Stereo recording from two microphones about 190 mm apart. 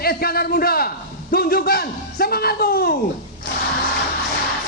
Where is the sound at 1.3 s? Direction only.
55° left (ahead or behind).